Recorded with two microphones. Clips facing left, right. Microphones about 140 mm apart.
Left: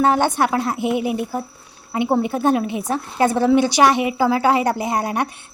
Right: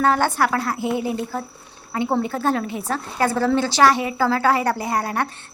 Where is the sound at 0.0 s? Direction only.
20° left (ahead or behind).